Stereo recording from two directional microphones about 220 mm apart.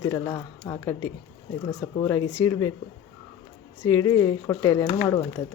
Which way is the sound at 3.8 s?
10° left (ahead or behind).